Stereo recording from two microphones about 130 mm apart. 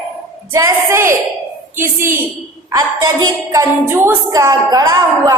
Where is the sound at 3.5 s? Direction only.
20° right (ahead or behind).